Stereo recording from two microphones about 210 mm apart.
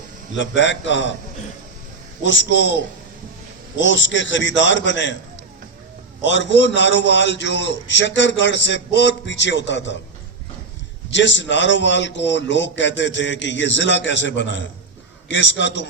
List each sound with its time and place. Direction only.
0.3 s a man's voice: 60° left (ahead or behind)
2.2 s a man's voice: 60° left (ahead or behind)
3.8 s a man's voice: 60° left (ahead or behind)
6.2 s a man's voice: 60° left (ahead or behind)
11.1 s a man's voice: 60° left (ahead or behind)